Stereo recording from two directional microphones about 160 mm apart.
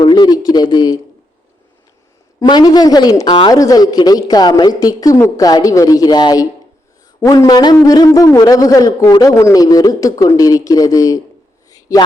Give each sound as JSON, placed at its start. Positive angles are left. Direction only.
{"t": 0.0, "sound": "speech", "side_deg": 25}
{"t": 2.4, "sound": "a man's voice", "side_deg": 25}
{"t": 11.7, "sound": "a sound", "side_deg": 20}